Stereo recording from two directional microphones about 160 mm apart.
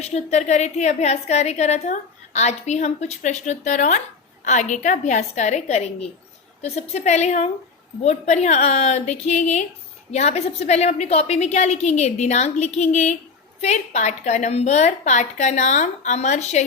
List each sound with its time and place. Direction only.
0.0 s a woman's voice: 45° left (ahead or behind)